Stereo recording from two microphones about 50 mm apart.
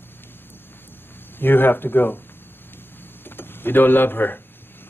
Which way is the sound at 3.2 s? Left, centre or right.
Left.